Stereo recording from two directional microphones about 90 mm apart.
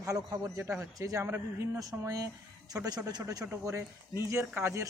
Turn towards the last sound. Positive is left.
turn(degrees=-30)  # may be behind; listen again after turning